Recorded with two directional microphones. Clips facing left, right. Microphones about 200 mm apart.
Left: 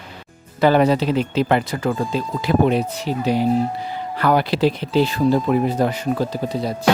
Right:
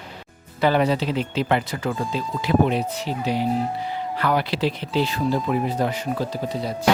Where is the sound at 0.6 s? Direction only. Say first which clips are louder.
Left 4 dB; 45° left (ahead or behind).